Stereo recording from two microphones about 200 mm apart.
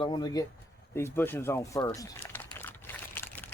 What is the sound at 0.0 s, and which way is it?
Speech, 20° left (ahead or behind).